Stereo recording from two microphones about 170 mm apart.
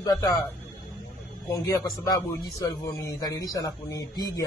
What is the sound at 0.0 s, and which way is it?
Speech, 20° left (ahead or behind).